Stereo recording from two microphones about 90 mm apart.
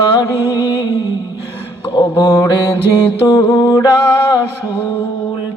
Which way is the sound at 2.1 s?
30° left (ahead or behind).